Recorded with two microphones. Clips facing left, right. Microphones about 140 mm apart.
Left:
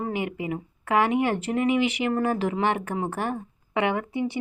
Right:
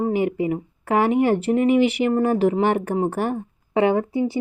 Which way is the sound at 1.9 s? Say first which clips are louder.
Right 5 dB; 35° right (ahead or behind).